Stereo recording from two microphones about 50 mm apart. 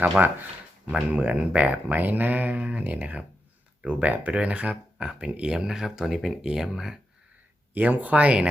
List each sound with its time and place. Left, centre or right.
0.9 s speech: centre
4.3 s speech: right
5.0 s speech: centre
7.7 s speech: right